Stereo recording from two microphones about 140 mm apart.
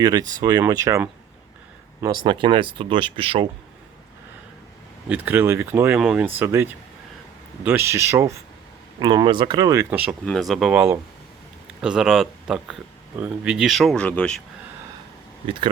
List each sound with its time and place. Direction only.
0.0 s speech: 25° right (ahead or behind)
5.0 s speech: 10° right (ahead or behind)
6.0 s speech: centre (ahead or behind)
6.4 s speech: 15° right (ahead or behind)
9.0 s speech: 30° right (ahead or behind)
9.9 s speech: 15° right (ahead or behind)
10.2 s speech: centre (ahead or behind)